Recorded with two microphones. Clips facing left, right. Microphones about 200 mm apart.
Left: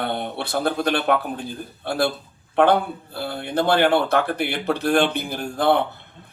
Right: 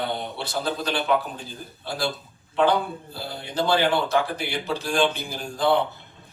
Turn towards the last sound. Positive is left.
turn(degrees=60)  # may be behind; listen again after turning